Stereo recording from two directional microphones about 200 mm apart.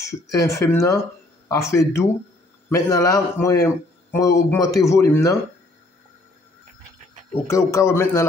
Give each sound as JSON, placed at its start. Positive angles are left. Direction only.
{"t": 0.0, "sound": "a man's voice", "side_deg": 15}
{"t": 7.4, "sound": "a man's voice", "side_deg": 15}